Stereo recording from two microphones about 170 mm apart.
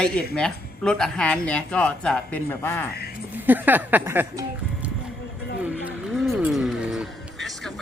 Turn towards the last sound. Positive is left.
turn(degrees=0)  # may be behind; listen again after turning